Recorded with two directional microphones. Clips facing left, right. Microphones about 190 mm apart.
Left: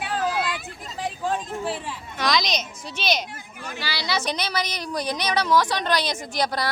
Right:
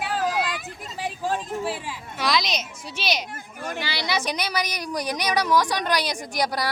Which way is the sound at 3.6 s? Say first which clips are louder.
Right 5 dB; 50° right (ahead or behind).